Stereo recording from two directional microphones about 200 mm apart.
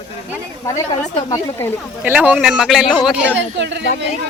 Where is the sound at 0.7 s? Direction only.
15° left (ahead or behind).